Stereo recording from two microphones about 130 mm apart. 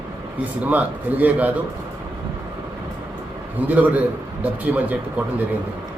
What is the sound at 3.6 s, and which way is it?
A man's voice, 10° right (ahead or behind).